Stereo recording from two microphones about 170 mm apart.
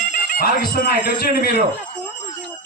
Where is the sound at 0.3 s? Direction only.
55° left (ahead or behind).